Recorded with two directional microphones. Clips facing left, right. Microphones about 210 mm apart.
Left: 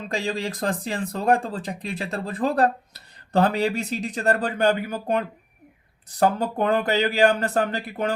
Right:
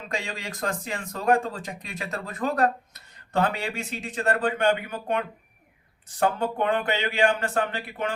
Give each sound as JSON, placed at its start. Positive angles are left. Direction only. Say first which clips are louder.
{"t": 0.1, "sound": "speech", "louder": "left 6 dB", "side_deg": 35}